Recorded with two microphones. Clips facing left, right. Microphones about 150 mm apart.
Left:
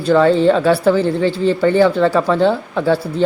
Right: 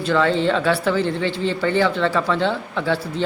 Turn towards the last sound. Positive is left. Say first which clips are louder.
# left 6 dB
turn(degrees=40)  # may be behind; listen again after turning